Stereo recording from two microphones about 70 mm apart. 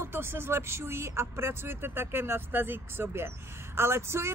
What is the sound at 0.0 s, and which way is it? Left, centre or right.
Speech, right.